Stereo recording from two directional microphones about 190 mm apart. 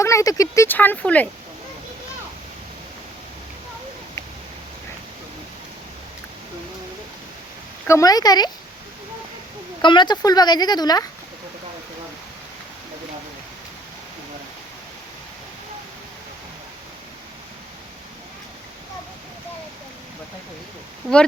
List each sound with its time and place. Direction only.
0.0 s speech: 15° left (ahead or behind)
7.9 s speech: 15° left (ahead or behind)
9.8 s speech: 25° left (ahead or behind)
21.0 s speech: 15° right (ahead or behind)